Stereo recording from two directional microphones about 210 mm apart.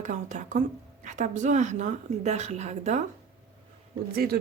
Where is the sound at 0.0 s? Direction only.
35° right (ahead or behind).